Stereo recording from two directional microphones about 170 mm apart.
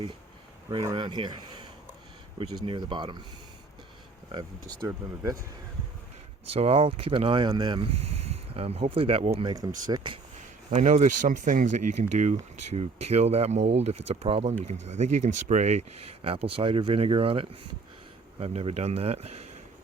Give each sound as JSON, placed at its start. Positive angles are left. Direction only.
{"t": 0.9, "sound": "speech", "side_deg": -25}
{"t": 4.3, "sound": "speech", "side_deg": -25}
{"t": 6.5, "sound": "speech", "side_deg": -35}
{"t": 10.7, "sound": "speech", "side_deg": -45}